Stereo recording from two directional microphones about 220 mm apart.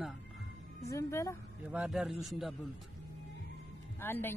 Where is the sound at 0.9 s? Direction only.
15° left (ahead or behind).